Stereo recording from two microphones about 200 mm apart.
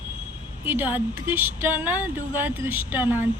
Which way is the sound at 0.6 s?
10° right (ahead or behind).